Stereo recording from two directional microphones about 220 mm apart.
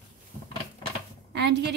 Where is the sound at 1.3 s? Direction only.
50° right (ahead or behind).